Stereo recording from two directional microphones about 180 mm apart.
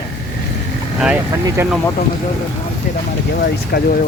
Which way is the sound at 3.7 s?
55° left (ahead or behind).